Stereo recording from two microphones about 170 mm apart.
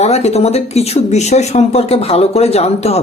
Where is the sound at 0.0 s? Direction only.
40° left (ahead or behind).